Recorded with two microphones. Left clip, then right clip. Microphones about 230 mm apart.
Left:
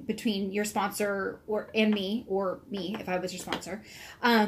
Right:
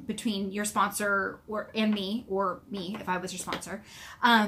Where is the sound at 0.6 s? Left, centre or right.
Right.